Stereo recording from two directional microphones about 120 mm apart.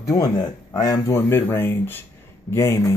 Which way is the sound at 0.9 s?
20° left (ahead or behind).